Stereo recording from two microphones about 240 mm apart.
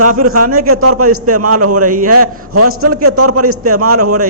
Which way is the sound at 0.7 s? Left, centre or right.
Right.